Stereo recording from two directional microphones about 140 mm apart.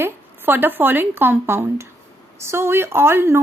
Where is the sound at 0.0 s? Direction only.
15° right (ahead or behind).